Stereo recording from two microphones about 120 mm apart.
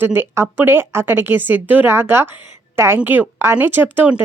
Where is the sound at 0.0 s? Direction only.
20° right (ahead or behind).